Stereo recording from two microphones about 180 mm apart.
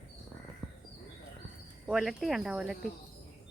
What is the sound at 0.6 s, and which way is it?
Bird, centre (ahead or behind).